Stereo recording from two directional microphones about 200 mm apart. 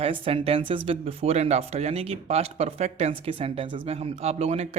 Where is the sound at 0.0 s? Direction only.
25° right (ahead or behind).